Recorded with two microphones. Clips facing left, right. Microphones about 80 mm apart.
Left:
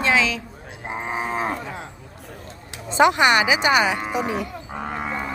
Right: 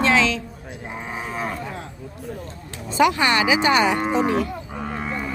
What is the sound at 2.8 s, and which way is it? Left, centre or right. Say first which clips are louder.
Speech: left 2 dB; left.